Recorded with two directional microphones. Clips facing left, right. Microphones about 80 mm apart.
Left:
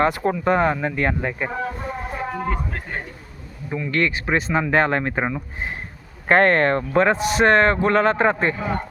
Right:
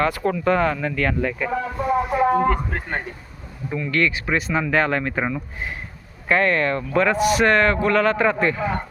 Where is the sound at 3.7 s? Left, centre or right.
Centre.